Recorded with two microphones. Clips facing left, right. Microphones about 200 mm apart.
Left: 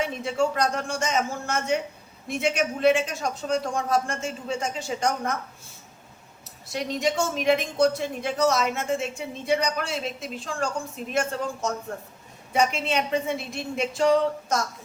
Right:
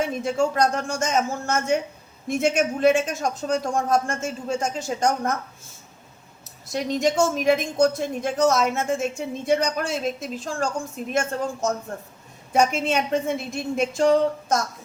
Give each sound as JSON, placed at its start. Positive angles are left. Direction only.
{"t": 0.0, "sound": "speech", "side_deg": -45}
{"t": 6.7, "sound": "speech", "side_deg": -45}